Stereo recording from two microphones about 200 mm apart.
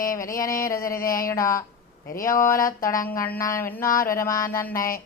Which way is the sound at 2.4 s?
15° left (ahead or behind).